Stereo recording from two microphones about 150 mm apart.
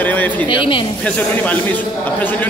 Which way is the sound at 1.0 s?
10° left (ahead or behind).